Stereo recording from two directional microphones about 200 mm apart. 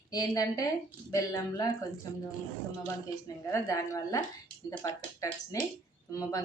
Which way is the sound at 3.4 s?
15° left (ahead or behind).